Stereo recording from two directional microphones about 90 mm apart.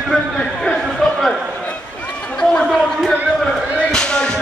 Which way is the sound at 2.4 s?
10° left (ahead or behind).